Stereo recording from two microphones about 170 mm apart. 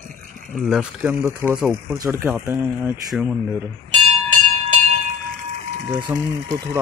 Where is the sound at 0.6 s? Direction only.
5° right (ahead or behind).